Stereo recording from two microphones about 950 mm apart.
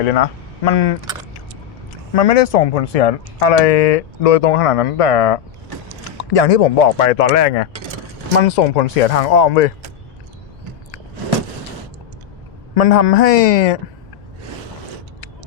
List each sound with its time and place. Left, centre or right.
0.0 s speech: left
2.1 s speech: left
7.2 s speech: left
12.7 s speech: left